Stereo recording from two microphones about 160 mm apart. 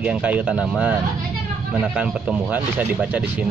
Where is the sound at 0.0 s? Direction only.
10° right (ahead or behind).